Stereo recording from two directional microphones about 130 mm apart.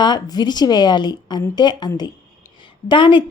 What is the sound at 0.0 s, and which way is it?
Speech, 35° left (ahead or behind).